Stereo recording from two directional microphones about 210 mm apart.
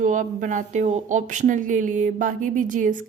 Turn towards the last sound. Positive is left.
turn(degrees=-40)  # may be behind; listen again after turning